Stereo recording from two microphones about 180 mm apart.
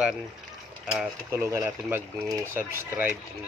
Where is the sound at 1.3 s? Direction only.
15° right (ahead or behind).